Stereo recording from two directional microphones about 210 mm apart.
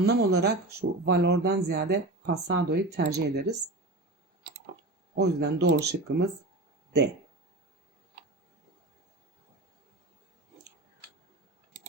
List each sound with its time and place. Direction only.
0.0 s speech: 50° right (ahead or behind)
5.1 s speech: 55° right (ahead or behind)